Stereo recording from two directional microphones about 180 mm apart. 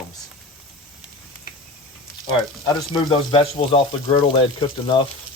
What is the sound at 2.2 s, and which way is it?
Speech, 25° left (ahead or behind).